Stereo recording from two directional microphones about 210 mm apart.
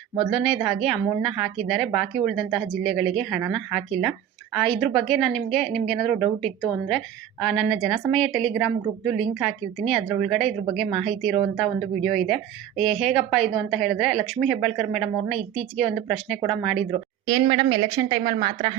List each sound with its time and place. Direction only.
0.3 s a woman's voice: centre (ahead or behind)
17.2 s a woman's voice: 25° right (ahead or behind)